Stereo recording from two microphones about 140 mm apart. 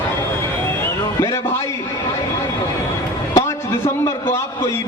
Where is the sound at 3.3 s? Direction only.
25° left (ahead or behind).